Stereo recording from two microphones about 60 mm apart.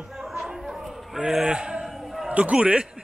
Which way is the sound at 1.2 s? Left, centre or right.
Centre.